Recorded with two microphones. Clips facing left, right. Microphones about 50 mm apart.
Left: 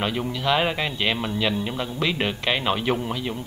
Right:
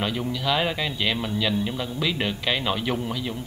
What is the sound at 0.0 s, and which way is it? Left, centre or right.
A man's voice, centre.